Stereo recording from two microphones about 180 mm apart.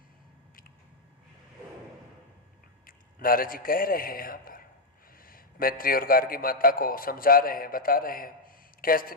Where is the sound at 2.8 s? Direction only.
50° left (ahead or behind).